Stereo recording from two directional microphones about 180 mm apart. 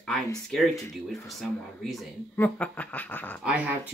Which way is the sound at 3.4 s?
5° right (ahead or behind).